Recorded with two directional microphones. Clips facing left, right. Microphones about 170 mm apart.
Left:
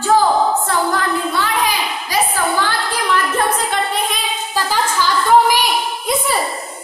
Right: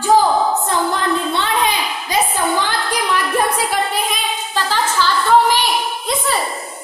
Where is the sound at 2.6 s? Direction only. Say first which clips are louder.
Even; 15° right (ahead or behind).